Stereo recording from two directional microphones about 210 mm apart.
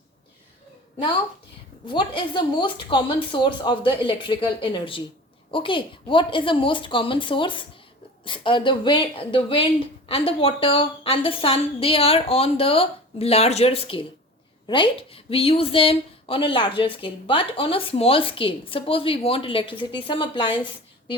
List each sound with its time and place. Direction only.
1.9 s a woman's voice: 25° left (ahead or behind)